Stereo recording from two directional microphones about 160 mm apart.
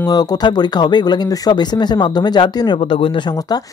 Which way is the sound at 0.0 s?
25° left (ahead or behind).